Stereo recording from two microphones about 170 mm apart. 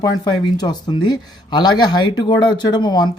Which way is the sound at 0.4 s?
25° left (ahead or behind).